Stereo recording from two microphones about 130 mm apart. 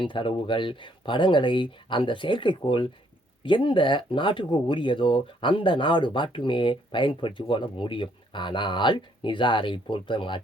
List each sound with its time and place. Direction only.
0.0 s speech: 40° left (ahead or behind)